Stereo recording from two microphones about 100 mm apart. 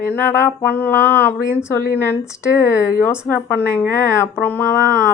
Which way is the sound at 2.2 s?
30° left (ahead or behind).